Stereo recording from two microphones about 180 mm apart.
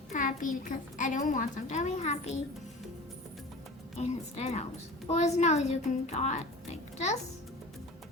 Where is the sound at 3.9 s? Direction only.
40° left (ahead or behind).